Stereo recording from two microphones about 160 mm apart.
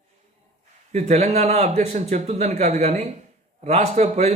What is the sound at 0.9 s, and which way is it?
A man's voice, 45° right (ahead or behind).